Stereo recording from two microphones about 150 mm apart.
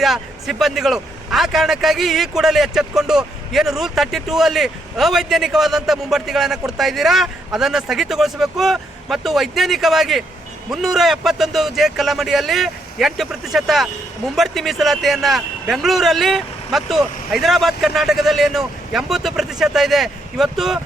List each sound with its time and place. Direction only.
0.0 s a man's voice: centre (ahead or behind)